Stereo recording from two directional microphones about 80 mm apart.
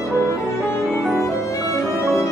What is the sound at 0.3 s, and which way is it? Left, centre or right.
Music, left.